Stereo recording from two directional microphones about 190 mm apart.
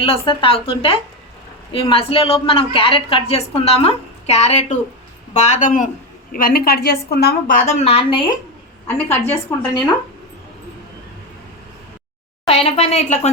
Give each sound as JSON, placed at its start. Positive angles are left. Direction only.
{"t": 0.0, "sound": "a woman's voice", "side_deg": 30}
{"t": 8.9, "sound": "a woman's voice", "side_deg": 10}
{"t": 12.5, "sound": "a woman's voice", "side_deg": 30}